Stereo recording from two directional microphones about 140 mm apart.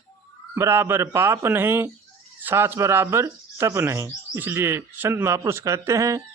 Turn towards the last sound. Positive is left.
turn(degrees=-20)  # may be behind; listen again after turning